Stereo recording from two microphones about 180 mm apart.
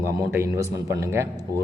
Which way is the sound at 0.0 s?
15° right (ahead or behind).